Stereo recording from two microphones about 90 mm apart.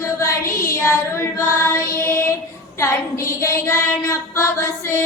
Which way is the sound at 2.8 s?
30° left (ahead or behind).